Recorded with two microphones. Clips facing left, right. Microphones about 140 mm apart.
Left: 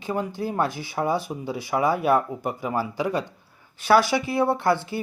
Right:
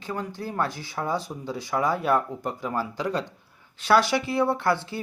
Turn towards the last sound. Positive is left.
turn(degrees=25)  # may be behind; listen again after turning